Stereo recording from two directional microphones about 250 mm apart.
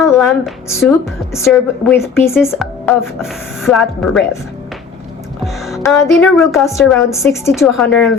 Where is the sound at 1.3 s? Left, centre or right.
Centre.